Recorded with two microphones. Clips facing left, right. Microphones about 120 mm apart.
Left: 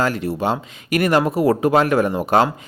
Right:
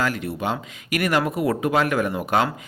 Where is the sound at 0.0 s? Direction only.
35° left (ahead or behind).